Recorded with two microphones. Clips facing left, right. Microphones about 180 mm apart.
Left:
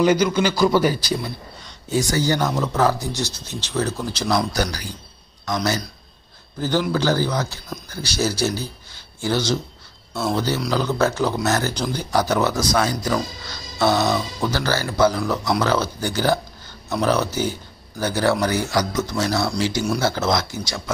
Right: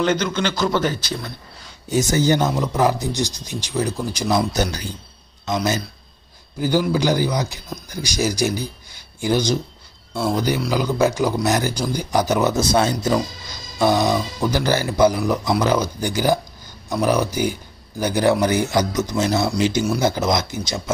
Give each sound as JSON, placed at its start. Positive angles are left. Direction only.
{"t": 0.0, "sound": "a man's voice", "side_deg": 10}
{"t": 1.9, "sound": "a man's voice", "side_deg": -20}
{"t": 13.0, "sound": "speech", "side_deg": -15}